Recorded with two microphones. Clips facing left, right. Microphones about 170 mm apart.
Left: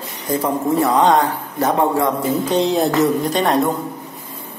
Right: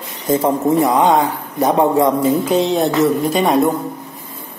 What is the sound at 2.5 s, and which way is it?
A man's voice, centre (ahead or behind).